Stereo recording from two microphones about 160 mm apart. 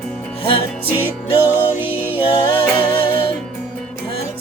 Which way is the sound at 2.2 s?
35° left (ahead or behind).